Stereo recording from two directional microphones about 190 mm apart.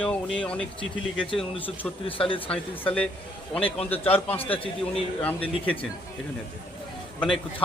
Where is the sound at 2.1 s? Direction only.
30° left (ahead or behind).